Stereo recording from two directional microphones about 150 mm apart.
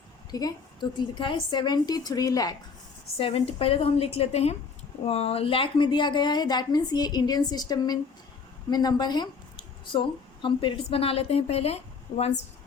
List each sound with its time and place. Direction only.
0.3 s a woman's voice: 25° left (ahead or behind)
3.2 s a woman's voice: 40° left (ahead or behind)